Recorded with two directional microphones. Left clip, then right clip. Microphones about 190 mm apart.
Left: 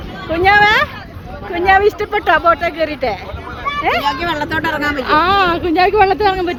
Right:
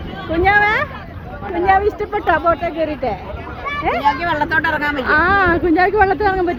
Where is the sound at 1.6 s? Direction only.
65° left (ahead or behind); by 3.1 s 85° left.